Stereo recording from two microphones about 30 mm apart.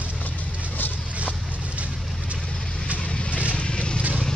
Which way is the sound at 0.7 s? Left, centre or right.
Left.